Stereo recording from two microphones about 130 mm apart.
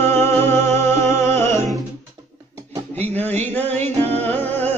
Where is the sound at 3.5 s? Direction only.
15° left (ahead or behind).